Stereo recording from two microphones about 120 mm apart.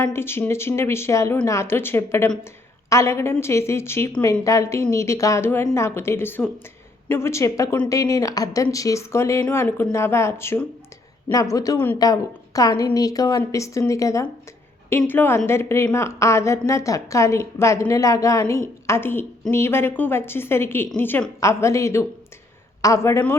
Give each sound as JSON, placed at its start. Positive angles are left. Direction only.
{"t": 0.0, "sound": "a woman's voice", "side_deg": 20}